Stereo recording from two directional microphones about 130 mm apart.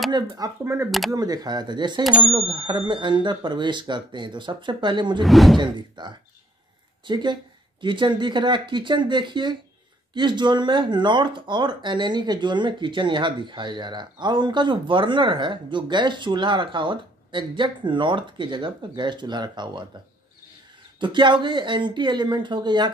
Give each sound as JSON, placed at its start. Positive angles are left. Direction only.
{"t": 0.1, "sound": "speech", "side_deg": -25}
{"t": 5.2, "sound": "speech", "side_deg": 0}
{"t": 5.6, "sound": "speech", "side_deg": -35}
{"t": 21.0, "sound": "speech", "side_deg": -35}